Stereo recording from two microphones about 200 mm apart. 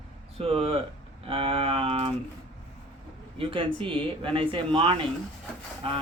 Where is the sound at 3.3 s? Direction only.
25° right (ahead or behind).